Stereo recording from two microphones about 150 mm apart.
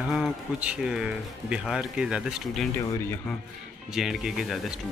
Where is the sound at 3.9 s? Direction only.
5° right (ahead or behind).